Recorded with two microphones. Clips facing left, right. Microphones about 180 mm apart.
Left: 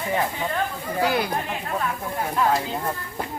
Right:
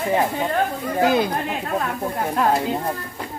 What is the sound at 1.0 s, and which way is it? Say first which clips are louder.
Speech: right 5 dB; 20° right (ahead or behind).